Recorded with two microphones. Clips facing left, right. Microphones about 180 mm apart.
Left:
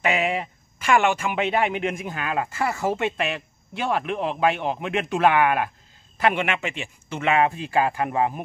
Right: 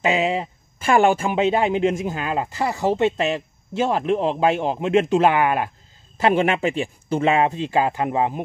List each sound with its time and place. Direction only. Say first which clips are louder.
0.0 s a man's voice: right 3 dB; 25° right (ahead or behind)